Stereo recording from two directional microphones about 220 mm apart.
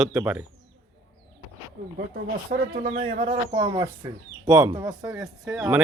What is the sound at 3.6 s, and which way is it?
Speech, 15° right (ahead or behind).